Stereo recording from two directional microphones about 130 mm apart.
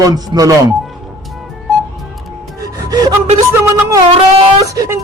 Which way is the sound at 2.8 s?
30° right (ahead or behind).